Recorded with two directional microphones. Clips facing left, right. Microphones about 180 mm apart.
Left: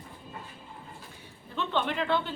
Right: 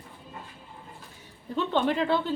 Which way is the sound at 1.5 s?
40° right (ahead or behind).